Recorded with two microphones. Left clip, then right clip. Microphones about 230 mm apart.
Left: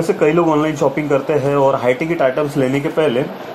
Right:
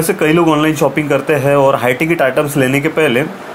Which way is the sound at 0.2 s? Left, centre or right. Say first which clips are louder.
Right 3 dB; right.